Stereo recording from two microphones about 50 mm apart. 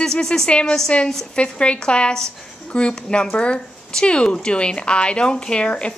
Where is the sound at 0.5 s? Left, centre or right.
Left.